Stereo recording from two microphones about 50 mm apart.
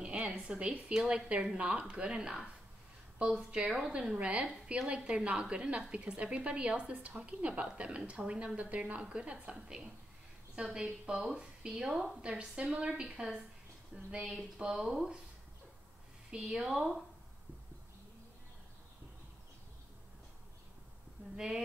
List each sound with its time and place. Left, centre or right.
0.0 s a woman's voice: right
3.3 s a woman's voice: centre
12.4 s a woman's voice: right
16.3 s speech: centre